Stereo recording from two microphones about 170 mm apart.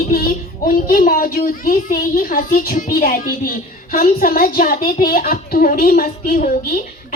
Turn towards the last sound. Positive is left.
turn(degrees=55)  # may be behind; listen again after turning